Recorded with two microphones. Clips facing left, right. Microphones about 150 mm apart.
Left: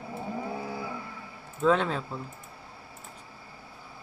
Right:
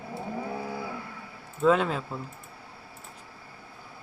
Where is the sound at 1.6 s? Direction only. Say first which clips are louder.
Right 2 dB; 5° right (ahead or behind).